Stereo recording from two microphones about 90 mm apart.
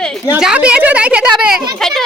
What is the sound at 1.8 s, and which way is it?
Speech, 5° left (ahead or behind).